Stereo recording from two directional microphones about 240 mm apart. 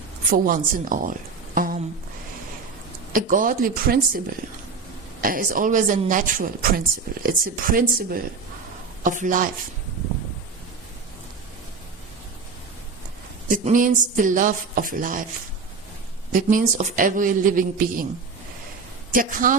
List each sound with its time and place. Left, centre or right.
0.3 s speech: right
1.5 s a sound: right
3.1 s speech: right
5.2 s speech: right
13.5 s speech: right
16.3 s speech: right
19.1 s speech: right